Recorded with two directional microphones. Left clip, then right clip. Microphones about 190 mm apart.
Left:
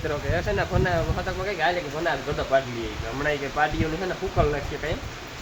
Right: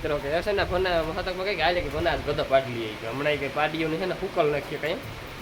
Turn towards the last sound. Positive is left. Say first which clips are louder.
# even
turn(degrees=-5)  # may be behind; listen again after turning